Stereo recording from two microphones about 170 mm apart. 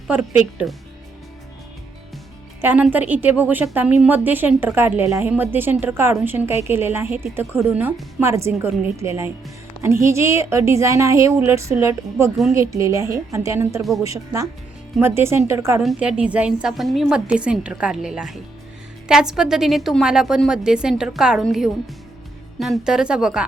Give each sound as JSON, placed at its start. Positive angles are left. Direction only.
{"t": 2.6, "sound": "a woman's voice", "side_deg": -10}
{"t": 15.8, "sound": "a woman's voice", "side_deg": -5}